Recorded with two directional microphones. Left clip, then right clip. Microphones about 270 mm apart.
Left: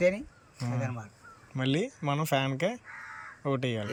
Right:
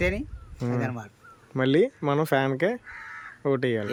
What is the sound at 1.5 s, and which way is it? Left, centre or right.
Speech, centre.